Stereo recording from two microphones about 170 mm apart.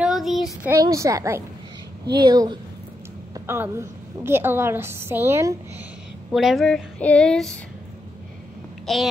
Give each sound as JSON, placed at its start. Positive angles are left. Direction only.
{"t": 0.0, "sound": "child singing", "side_deg": 0}
{"t": 0.7, "sound": "a woman's voice", "side_deg": -20}
{"t": 6.3, "sound": "child singing", "side_deg": 0}
{"t": 8.8, "sound": "a child's voice", "side_deg": 0}